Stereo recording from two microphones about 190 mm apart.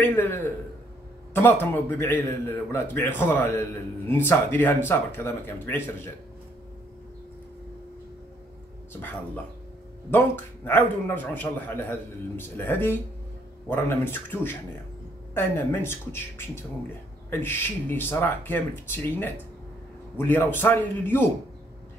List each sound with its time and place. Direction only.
0.0 s a man's voice: 10° left (ahead or behind)
10.1 s a man's voice: 10° left (ahead or behind)